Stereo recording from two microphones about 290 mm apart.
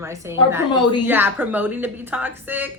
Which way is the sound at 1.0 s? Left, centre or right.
Centre.